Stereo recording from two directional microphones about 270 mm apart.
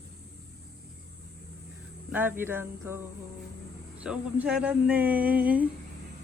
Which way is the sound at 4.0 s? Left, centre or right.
Centre.